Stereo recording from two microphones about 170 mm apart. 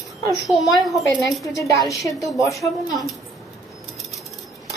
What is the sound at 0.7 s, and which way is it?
A woman's voice, 20° left (ahead or behind).